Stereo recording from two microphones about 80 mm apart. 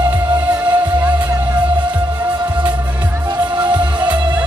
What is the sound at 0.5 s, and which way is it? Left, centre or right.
Music, right.